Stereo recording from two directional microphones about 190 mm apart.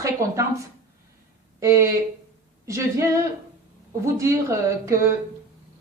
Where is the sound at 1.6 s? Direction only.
15° right (ahead or behind).